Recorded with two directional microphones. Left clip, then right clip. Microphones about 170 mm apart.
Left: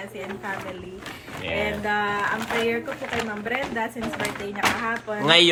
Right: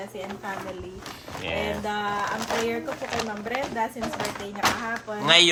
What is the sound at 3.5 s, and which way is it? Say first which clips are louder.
Speech: even; 20° right (ahead or behind).